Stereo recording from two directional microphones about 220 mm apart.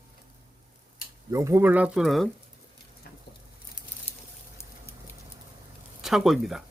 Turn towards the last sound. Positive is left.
turn(degrees=0)  # may be behind; listen again after turning